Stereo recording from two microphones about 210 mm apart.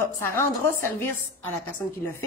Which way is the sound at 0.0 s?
10° left (ahead or behind).